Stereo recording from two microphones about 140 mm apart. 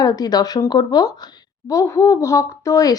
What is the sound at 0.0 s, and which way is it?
Speech, 25° left (ahead or behind).